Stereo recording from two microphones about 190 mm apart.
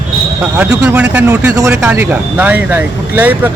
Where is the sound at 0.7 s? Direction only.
10° right (ahead or behind).